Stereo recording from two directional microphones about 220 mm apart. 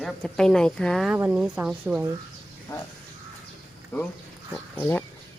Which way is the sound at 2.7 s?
15° left (ahead or behind).